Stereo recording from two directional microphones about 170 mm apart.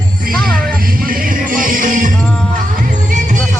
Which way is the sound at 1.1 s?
55° right (ahead or behind).